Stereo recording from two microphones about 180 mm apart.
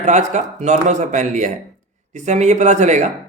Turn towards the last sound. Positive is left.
turn(degrees=-40)  # may be behind; listen again after turning